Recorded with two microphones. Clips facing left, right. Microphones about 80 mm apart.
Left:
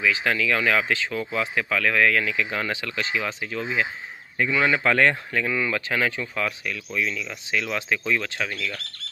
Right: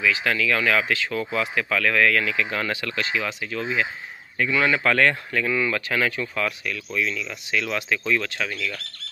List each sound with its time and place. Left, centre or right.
0.0 s speech: left
4.4 s speech: centre